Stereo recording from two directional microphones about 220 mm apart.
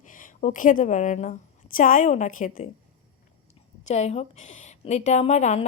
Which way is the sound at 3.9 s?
30° left (ahead or behind).